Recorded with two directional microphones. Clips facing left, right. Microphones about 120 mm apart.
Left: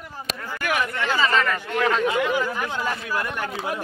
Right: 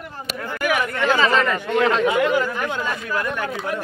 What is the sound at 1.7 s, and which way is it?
Speech, 20° right (ahead or behind).